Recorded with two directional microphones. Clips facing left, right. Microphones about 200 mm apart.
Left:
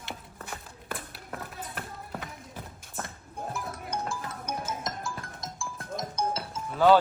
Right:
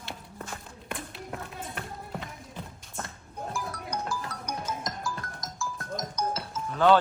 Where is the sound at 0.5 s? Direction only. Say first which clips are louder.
Left 1 dB; 5° left (ahead or behind).